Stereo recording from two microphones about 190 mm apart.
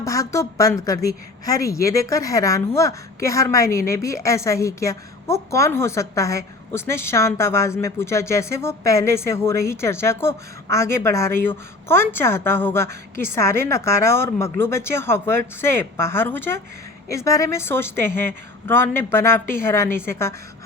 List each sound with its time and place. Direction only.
0.0 s a woman's voice: 15° left (ahead or behind)